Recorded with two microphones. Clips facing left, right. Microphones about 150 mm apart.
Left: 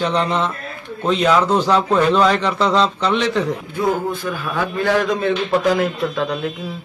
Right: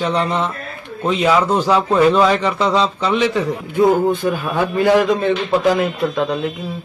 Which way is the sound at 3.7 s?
20° right (ahead or behind).